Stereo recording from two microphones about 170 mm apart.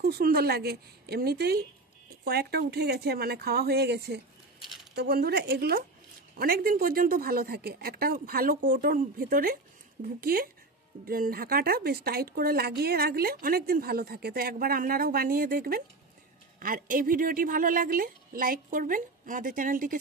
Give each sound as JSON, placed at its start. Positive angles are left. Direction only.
{"t": 0.0, "sound": "speech", "side_deg": -65}
{"t": 4.9, "sound": "speech", "side_deg": -65}